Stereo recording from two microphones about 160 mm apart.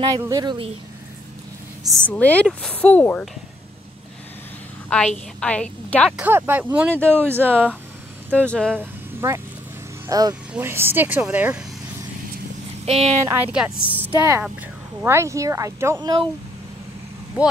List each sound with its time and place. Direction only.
0.2 s speech: 25° right (ahead or behind)
2.0 s a woman's voice: 10° left (ahead or behind)
4.8 s a woman's voice: 5° left (ahead or behind)
6.1 s a woman's voice: 10° right (ahead or behind)
8.3 s speech: 5° left (ahead or behind)
8.7 s vehicle: 15° right (ahead or behind)
10.0 s a woman's voice: 25° right (ahead or behind); by 11.6 s 5° right (ahead or behind)
12.8 s speech: 40° right (ahead or behind)
13.2 s a woman's voice: 15° right (ahead or behind)
17.4 s a woman's voice: 10° right (ahead or behind)